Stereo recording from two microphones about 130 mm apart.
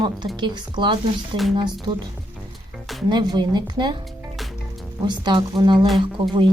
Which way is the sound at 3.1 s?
35° right (ahead or behind).